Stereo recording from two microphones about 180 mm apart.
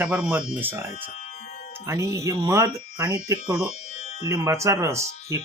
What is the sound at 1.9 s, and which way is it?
Speech, 15° right (ahead or behind).